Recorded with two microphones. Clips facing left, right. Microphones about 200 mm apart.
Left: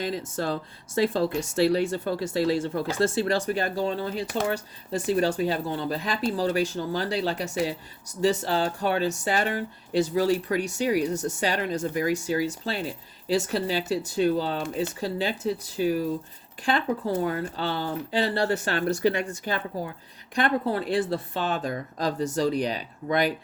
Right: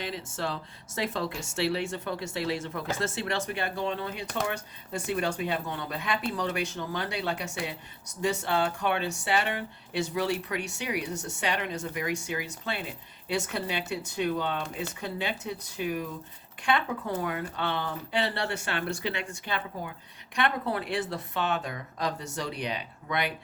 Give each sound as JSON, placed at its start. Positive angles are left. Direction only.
{"t": 0.0, "sound": "speech", "side_deg": 40}